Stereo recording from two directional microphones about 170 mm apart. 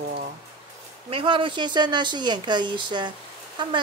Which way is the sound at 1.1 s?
30° right (ahead or behind).